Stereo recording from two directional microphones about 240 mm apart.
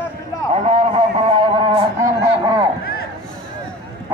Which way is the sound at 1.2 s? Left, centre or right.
Right.